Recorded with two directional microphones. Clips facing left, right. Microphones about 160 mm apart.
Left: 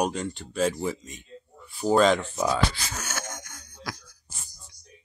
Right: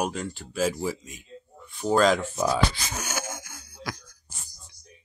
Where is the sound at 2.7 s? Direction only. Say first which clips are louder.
Right 2 dB; 15° right (ahead or behind).